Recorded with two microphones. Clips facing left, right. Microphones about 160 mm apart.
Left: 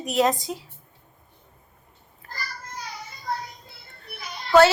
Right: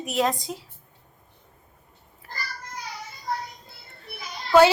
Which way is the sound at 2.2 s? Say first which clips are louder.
Right 1 dB; 5° right (ahead or behind).